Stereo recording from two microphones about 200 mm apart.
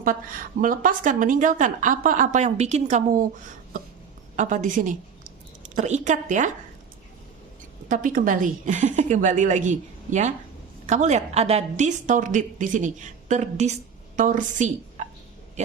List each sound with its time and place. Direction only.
0.6 s a woman's voice: 40° right (ahead or behind)
4.4 s a woman's voice: 40° right (ahead or behind)
7.9 s a woman's voice: 40° right (ahead or behind)